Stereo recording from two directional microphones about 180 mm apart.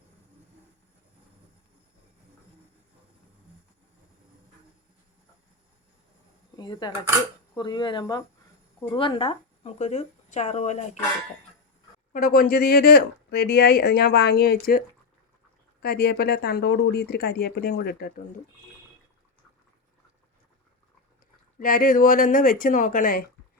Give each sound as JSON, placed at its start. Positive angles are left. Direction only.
{"t": 6.6, "sound": "speech", "side_deg": 25}
{"t": 12.1, "sound": "speech", "side_deg": 55}
{"t": 21.6, "sound": "speech", "side_deg": 50}